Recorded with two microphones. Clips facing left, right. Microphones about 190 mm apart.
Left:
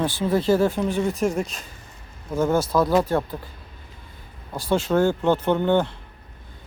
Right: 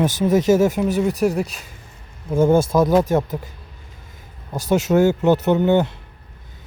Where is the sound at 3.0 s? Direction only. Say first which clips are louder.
Right 4 dB; 25° right (ahead or behind).